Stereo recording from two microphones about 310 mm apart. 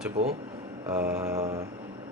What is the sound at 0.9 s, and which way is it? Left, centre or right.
Mantra, centre.